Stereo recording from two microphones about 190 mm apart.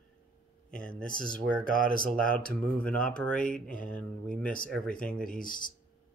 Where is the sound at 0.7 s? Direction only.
45° left (ahead or behind).